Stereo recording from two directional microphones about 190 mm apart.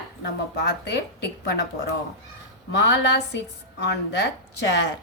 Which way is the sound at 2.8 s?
65° left (ahead or behind).